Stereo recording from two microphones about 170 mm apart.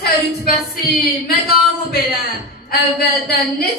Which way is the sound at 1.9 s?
65° left (ahead or behind).